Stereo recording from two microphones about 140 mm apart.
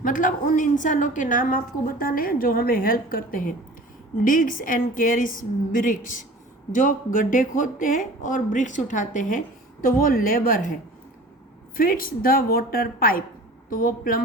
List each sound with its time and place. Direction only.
0.0 s a woman's voice: 75° left (ahead or behind)
9.8 s a woman's voice: 90° left
11.8 s a woman's voice: 90° left